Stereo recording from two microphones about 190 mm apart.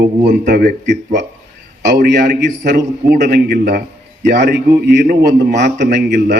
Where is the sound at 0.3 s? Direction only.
55° right (ahead or behind).